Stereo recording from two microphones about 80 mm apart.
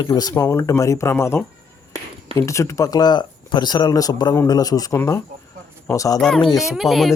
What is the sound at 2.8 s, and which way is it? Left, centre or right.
Speech, left.